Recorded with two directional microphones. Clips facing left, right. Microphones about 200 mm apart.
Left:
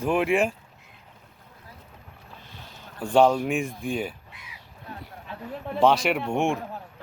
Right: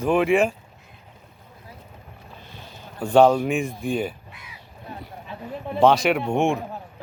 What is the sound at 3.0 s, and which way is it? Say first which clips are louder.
Speech: right 3 dB; 5° right (ahead or behind).